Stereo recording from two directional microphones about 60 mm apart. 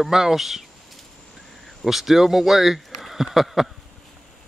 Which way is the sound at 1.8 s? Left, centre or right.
Centre.